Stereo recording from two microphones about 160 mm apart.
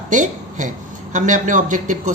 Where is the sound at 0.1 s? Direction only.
50° right (ahead or behind).